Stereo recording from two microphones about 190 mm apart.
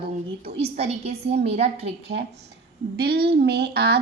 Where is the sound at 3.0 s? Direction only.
55° right (ahead or behind).